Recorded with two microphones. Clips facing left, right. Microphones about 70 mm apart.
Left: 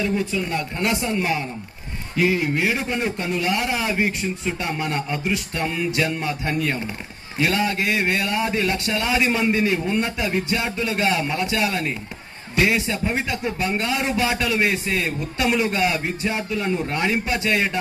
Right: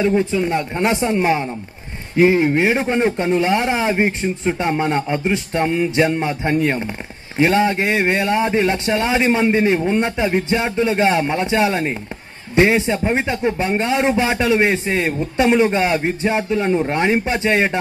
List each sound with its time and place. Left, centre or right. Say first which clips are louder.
0.0 s speech: right 6 dB; right